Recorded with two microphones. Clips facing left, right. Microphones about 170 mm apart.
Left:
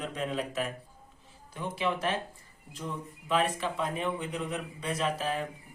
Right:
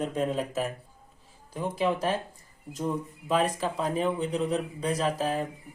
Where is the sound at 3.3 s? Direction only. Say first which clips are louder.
Right 2 dB; 40° right (ahead or behind).